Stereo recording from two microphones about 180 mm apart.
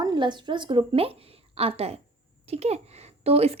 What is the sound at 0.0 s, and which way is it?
A woman's voice, 25° right (ahead or behind).